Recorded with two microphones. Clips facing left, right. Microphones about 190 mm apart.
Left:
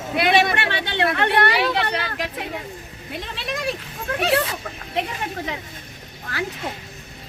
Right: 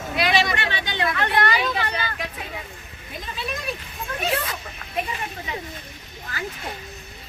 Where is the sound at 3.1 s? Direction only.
75° left (ahead or behind).